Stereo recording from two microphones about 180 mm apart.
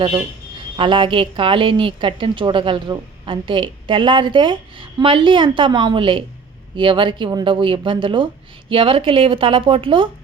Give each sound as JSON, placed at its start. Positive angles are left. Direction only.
{"t": 0.8, "sound": "a woman's voice", "side_deg": -30}